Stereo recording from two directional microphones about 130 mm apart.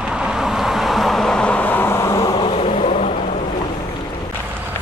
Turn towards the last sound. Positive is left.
turn(degrees=65)  # may be behind; listen again after turning